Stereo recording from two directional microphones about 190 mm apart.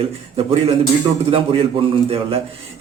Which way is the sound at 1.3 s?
30° right (ahead or behind).